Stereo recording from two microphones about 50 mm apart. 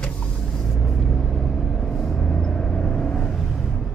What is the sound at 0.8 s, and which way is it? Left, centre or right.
Vehicle, centre.